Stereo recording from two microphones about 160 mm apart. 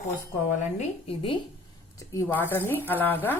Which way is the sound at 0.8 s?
35° left (ahead or behind).